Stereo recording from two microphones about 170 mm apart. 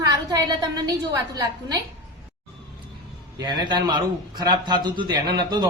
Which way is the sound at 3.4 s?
25° right (ahead or behind).